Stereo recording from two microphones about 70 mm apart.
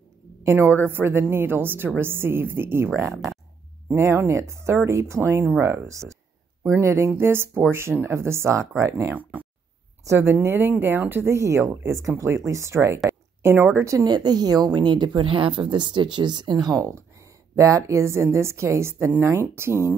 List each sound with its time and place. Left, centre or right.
0.4 s a woman's voice: right
4.3 s speech: right
14.0 s a woman's voice: right